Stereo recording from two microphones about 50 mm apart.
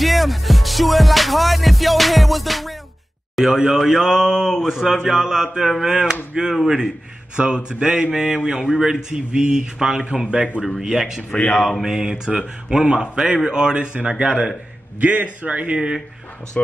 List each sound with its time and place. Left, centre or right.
0.0 s music: centre
3.3 s speech: centre
7.3 s speech: centre
8.1 s speech: centre
9.1 s speech: centre
11.5 s mantra: centre
11.8 s speech: centre
15.0 s a man's voice: right
16.6 s speech: left